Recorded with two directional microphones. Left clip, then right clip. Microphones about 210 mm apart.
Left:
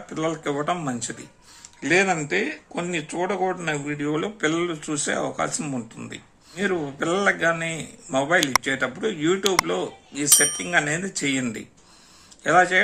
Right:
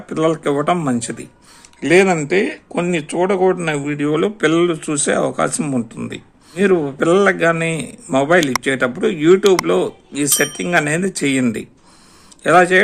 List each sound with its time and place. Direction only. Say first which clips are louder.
0.1 s a man's voice: right 9 dB; 50° right (ahead or behind)